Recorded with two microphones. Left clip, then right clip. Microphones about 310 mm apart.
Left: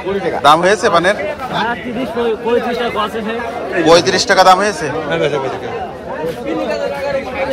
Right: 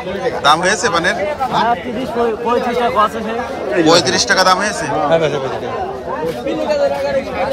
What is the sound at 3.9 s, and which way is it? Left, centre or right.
Speech, centre.